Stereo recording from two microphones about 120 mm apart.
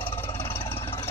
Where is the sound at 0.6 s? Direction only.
50° left (ahead or behind).